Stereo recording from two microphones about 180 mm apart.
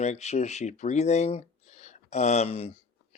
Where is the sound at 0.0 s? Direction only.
40° left (ahead or behind).